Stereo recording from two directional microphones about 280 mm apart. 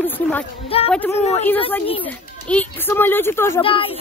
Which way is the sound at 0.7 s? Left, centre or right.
Centre.